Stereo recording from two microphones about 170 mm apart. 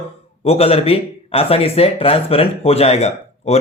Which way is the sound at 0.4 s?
35° left (ahead or behind).